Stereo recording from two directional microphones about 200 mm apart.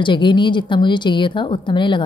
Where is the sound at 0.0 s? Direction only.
25° left (ahead or behind).